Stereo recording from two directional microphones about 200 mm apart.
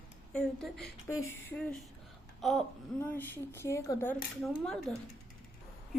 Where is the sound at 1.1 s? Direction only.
85° left.